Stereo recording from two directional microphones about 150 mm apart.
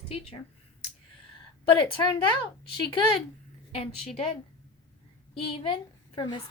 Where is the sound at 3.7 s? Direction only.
40° left (ahead or behind).